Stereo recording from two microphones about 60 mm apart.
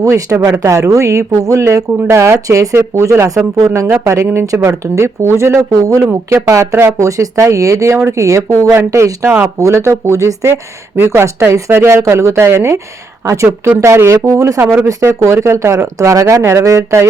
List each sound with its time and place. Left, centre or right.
0.0 s speech: right
2.0 s speech: right
3.6 s speech: right
4.0 s speech: right
4.8 s speech: right
5.7 s a man's voice: right
6.2 s speech: right
7.1 s speech: right
9.4 s speech: right
10.9 s speech: right
16.4 s speech: right